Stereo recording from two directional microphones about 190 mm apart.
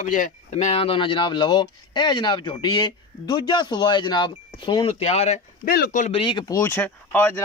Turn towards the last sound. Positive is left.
turn(degrees=10)  # may be behind; listen again after turning